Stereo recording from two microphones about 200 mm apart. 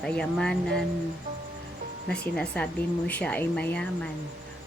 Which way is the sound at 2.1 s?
5° left (ahead or behind).